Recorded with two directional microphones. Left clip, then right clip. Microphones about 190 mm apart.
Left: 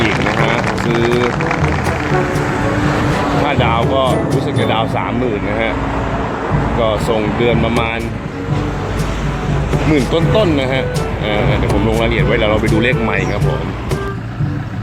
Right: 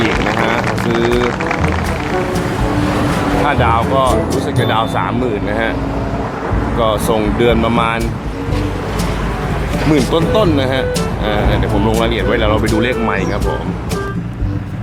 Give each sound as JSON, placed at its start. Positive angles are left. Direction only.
{"t": 0.0, "sound": "music", "side_deg": 0}
{"t": 2.6, "sound": "vehicle", "side_deg": -50}
{"t": 3.4, "sound": "speech", "side_deg": 0}
{"t": 6.7, "sound": "speech", "side_deg": 0}
{"t": 9.9, "sound": "speech", "side_deg": -5}